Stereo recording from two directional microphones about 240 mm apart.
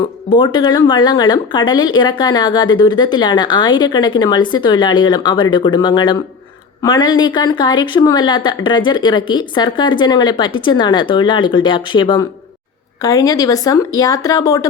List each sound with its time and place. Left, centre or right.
0.3 s speech: centre